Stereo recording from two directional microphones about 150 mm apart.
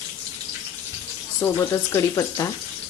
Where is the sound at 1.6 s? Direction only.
20° left (ahead or behind).